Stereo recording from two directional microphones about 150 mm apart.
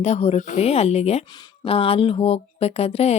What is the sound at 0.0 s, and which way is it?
Speech, 45° left (ahead or behind).